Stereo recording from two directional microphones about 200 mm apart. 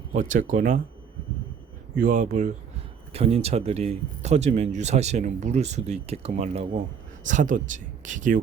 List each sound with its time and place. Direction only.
0.1 s speech: 40° right (ahead or behind)
2.0 s speech: 40° right (ahead or behind)
3.1 s speech: 30° right (ahead or behind)